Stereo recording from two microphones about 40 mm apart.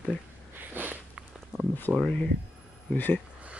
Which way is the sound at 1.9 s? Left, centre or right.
Centre.